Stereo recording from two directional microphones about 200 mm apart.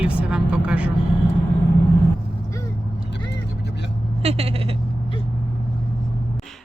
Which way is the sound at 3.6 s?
60° left (ahead or behind).